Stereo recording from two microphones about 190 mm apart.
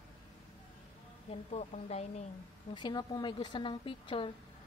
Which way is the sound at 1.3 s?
35° left (ahead or behind).